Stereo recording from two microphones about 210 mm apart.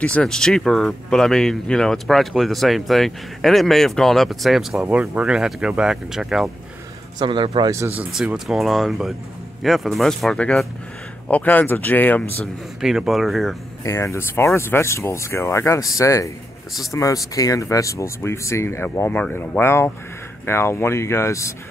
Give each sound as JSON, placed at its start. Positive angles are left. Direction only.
{"t": 0.0, "sound": "speech", "side_deg": 5}
{"t": 7.2, "sound": "a man's voice", "side_deg": -25}
{"t": 8.0, "sound": "speech", "side_deg": -5}
{"t": 13.8, "sound": "speech", "side_deg": 15}